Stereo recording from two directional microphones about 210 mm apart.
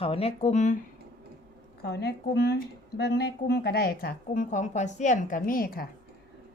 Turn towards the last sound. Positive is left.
turn(degrees=45)  # may be behind; listen again after turning